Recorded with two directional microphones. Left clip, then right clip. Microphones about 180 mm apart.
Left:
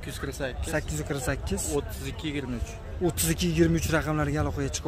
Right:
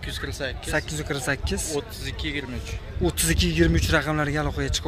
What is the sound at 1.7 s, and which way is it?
Speech, 65° left (ahead or behind).